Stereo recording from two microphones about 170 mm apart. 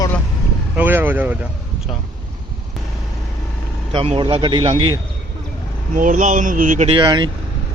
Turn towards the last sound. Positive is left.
turn(degrees=-25)  # may be behind; listen again after turning